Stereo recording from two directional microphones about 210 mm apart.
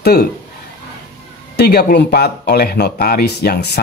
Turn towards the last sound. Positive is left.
turn(degrees=50)  # may be behind; listen again after turning